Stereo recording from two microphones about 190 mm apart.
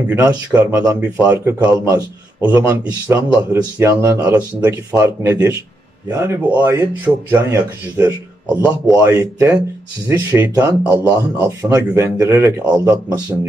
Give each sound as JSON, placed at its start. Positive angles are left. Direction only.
{"t": 0.5, "sound": "speech", "side_deg": -10}